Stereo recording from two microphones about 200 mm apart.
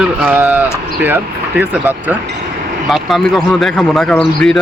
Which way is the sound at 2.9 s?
Centre (ahead or behind).